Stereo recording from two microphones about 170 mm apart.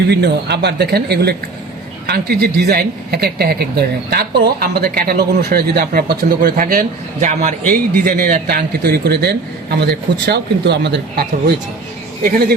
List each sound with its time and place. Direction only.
0.1 s speech: 80° right